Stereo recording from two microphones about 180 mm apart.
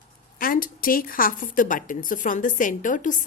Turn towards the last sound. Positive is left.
turn(degrees=45)  # may be behind; listen again after turning